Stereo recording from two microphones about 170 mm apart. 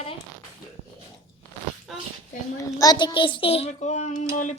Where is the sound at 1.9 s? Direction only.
Centre (ahead or behind).